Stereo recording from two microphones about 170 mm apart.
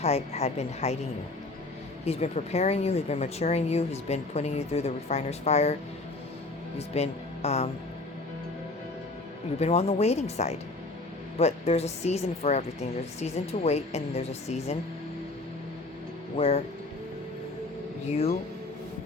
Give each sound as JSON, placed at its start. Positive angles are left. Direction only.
{"t": 0.0, "sound": "speech", "side_deg": 40}
{"t": 2.0, "sound": "speech", "side_deg": 40}
{"t": 6.7, "sound": "speech", "side_deg": 40}
{"t": 9.6, "sound": "speech", "side_deg": 40}
{"t": 16.4, "sound": "speech", "side_deg": 35}